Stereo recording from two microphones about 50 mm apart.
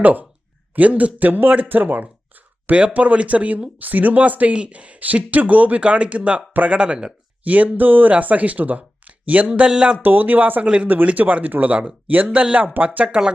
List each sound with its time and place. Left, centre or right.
0.0 s speech: right
9.5 s a sound: centre
10.0 s speech: right
13.1 s speech: centre